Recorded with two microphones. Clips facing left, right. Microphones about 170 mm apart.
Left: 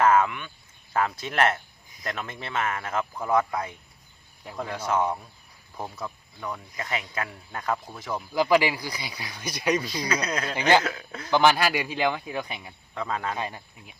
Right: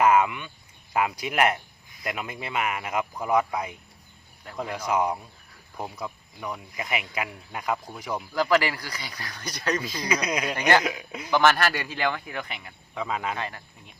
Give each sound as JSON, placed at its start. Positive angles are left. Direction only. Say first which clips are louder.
{"t": 0.0, "sound": "a sound", "louder": "even", "side_deg": -10}
{"t": 0.9, "sound": "speech", "louder": "right 1 dB", "side_deg": -10}
{"t": 8.3, "sound": "speech", "louder": "left 2 dB", "side_deg": 15}
{"t": 10.1, "sound": "speech", "louder": "right 3 dB", "side_deg": -10}
{"t": 11.3, "sound": "speech", "louder": "left 1 dB", "side_deg": 15}
{"t": 12.9, "sound": "speech", "louder": "even", "side_deg": -5}
{"t": 13.3, "sound": "speech", "louder": "left 1 dB", "side_deg": 15}